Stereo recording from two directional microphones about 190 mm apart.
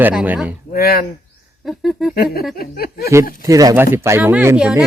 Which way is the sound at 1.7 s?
Centre (ahead or behind).